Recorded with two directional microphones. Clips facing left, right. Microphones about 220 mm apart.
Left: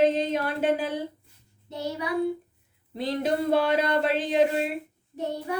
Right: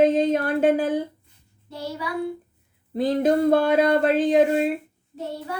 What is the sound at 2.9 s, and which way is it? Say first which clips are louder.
Speech: right 7 dB; 45° right (ahead or behind).